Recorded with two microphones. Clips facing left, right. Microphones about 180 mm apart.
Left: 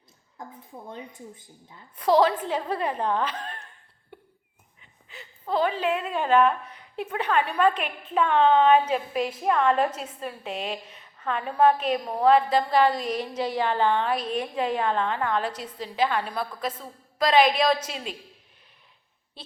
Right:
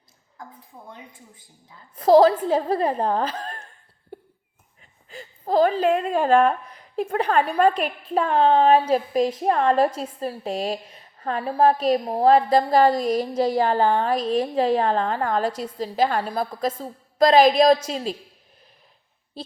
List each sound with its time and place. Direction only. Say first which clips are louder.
0.4 s a woman's voice: left 1 dB; 25° left (ahead or behind)
2.0 s a woman's voice: right 6 dB; 40° right (ahead or behind)
4.1 s a sound: right 8 dB; 40° right (ahead or behind)
4.8 s a woman's voice: right 6 dB; 45° right (ahead or behind)